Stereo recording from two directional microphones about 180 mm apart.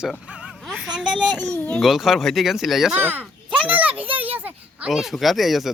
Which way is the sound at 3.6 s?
10° right (ahead or behind).